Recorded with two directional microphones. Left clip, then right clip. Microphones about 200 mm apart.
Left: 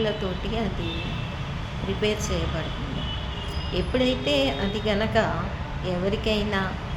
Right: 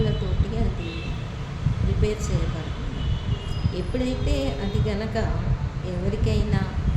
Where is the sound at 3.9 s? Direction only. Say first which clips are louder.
Left 6 dB; 15° right (ahead or behind).